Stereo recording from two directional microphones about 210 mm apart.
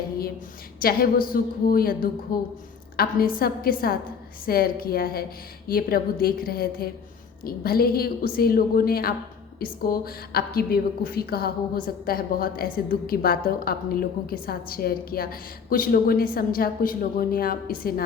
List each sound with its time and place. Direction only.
0.8 s a woman's voice: 45° left (ahead or behind)